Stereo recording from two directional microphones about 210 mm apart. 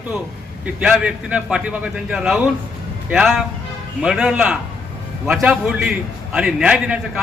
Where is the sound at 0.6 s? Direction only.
5° right (ahead or behind).